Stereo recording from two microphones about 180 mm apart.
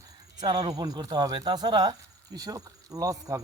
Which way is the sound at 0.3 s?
20° right (ahead or behind).